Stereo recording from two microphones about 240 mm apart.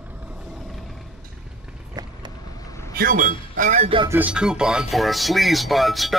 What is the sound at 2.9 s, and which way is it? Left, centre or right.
Speech, right.